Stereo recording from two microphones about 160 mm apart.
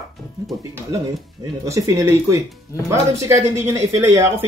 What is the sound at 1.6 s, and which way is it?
Speech, 20° right (ahead or behind).